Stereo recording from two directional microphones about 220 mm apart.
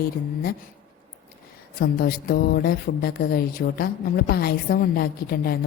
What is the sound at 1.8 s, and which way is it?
Speech, 40° left (ahead or behind).